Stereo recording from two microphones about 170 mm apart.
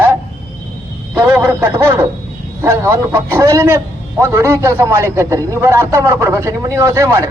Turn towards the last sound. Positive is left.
turn(degrees=-20)  # may be behind; listen again after turning